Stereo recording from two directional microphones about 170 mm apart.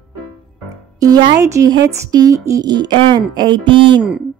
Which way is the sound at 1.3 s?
20° right (ahead or behind).